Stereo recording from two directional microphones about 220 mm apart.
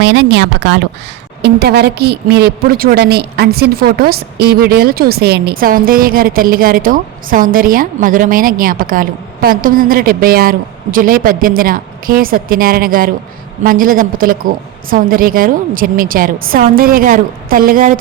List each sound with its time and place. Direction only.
0.0 s a woman's voice: 55° right (ahead or behind)